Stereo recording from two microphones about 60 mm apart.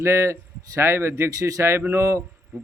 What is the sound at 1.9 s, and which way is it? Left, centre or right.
Speech, right.